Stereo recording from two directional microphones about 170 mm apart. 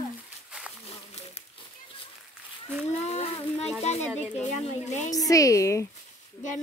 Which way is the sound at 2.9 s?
40° left (ahead or behind).